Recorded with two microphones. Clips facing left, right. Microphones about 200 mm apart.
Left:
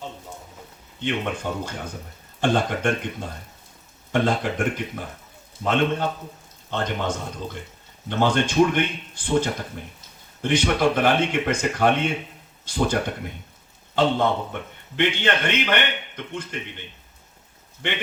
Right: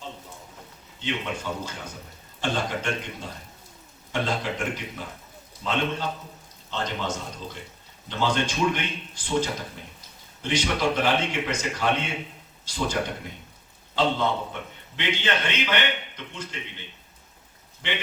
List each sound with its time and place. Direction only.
0.9 s a man's voice: 55° left (ahead or behind)